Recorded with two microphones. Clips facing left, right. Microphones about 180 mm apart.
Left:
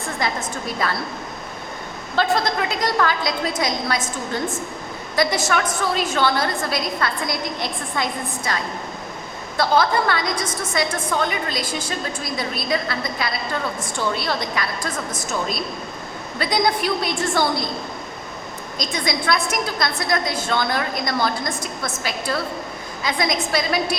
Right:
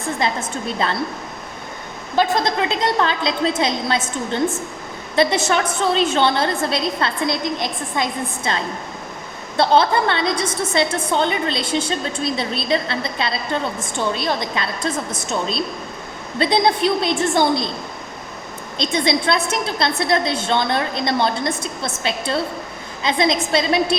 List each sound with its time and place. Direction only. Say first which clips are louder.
0.2 s a woman's voice: right 1 dB; 25° right (ahead or behind)
2.1 s a woman's voice: right 2 dB; 20° right (ahead or behind)
5.1 s a woman's voice: right 3 dB; 25° right (ahead or behind)
9.6 s a woman's voice: right 3 dB; 25° right (ahead or behind)
18.8 s a woman's voice: right 5 dB; 25° right (ahead or behind)